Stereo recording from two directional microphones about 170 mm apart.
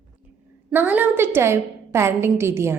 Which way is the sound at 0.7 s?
10° right (ahead or behind).